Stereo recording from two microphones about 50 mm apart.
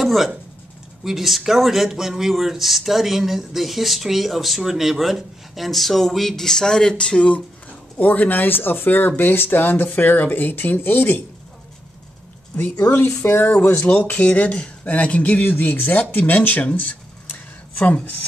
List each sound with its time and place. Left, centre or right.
0.0 s speech: centre; by 7.4 s left
8.0 s speech: left
13.2 s speech: left
13.5 s speech: left
15.4 s speech: left
16.7 s a sound: left